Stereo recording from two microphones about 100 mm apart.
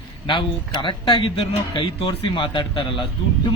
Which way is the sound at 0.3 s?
55° left (ahead or behind).